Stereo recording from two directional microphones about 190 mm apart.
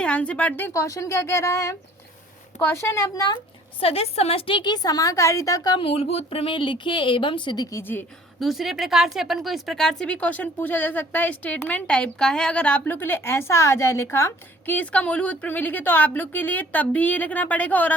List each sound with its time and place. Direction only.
0.0 s speech: 5° left (ahead or behind)
3.8 s a woman's voice: 30° left (ahead or behind); by 8.0 s 10° left (ahead or behind)
8.4 s a woman's voice: centre (ahead or behind)